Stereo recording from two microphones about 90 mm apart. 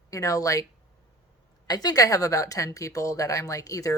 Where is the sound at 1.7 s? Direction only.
45° left (ahead or behind).